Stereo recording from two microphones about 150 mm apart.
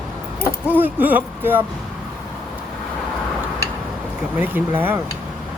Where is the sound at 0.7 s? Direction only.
10° right (ahead or behind).